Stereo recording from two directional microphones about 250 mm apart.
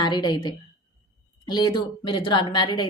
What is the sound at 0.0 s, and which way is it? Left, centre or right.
Speech, centre.